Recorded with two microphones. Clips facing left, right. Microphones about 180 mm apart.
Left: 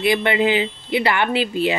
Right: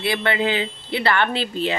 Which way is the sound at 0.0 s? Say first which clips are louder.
Left 4 dB; 15° left (ahead or behind).